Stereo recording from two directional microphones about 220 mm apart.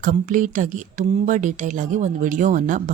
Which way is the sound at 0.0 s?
40° right (ahead or behind).